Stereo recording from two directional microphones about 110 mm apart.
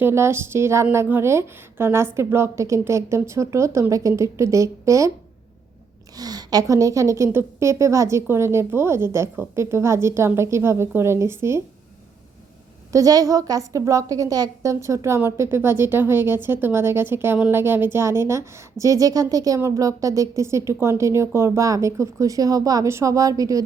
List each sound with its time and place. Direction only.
0.0 s a woman's voice: 25° right (ahead or behind)
6.1 s a woman's voice: 35° right (ahead or behind)
12.9 s a woman's voice: 30° right (ahead or behind)